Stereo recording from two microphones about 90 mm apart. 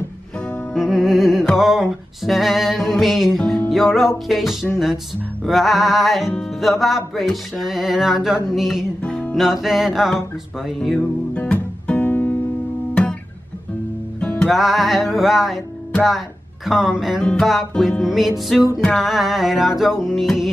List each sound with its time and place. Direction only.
0.7 s music: 5° right (ahead or behind)
9.0 s music: 10° left (ahead or behind)
9.3 s music: 5° right (ahead or behind)
11.3 s music: 15° left (ahead or behind)
14.2 s music: 10° left (ahead or behind)
14.5 s music: centre (ahead or behind)
16.6 s music: 5° right (ahead or behind)
17.2 s music: 10° left (ahead or behind)